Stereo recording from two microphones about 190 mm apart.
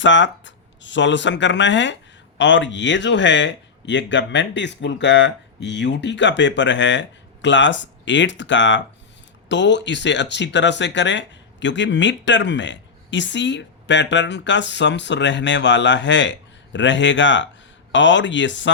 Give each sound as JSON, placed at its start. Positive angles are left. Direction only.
{"t": 0.0, "sound": "speech", "side_deg": 70}